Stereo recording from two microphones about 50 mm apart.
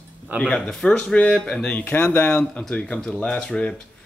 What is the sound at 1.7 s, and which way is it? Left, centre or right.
Speech, left.